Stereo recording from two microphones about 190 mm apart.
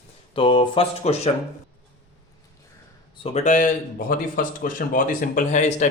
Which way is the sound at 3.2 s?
40° left (ahead or behind).